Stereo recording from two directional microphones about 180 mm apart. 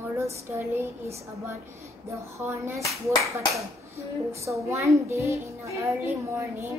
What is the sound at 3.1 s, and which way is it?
Speech, 15° right (ahead or behind).